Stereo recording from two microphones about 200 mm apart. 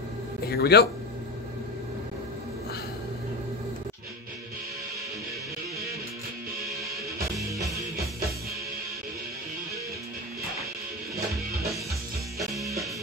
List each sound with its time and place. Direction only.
0.5 s speech: 55° left (ahead or behind)
7.5 s music: 15° right (ahead or behind)